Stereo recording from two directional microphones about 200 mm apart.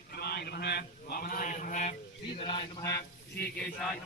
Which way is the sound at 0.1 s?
55° left (ahead or behind).